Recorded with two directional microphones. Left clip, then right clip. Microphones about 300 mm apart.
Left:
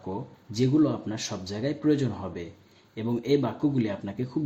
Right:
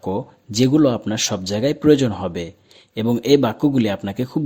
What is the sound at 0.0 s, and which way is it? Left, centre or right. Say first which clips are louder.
Speech: right 11 dB; right.